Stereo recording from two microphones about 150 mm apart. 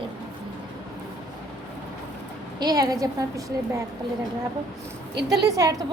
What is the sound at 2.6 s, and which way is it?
Speech, 25° right (ahead or behind).